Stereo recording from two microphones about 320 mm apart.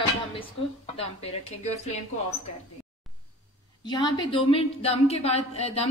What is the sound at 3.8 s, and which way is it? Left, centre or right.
A man's voice, centre.